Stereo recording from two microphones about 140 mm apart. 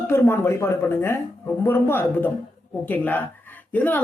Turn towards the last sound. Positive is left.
turn(degrees=10)  # may be behind; listen again after turning